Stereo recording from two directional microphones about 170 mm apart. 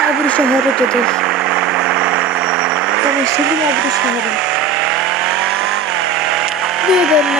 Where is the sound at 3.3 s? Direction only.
90° right.